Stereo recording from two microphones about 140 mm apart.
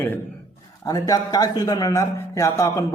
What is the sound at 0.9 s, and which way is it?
A man's voice, 25° left (ahead or behind).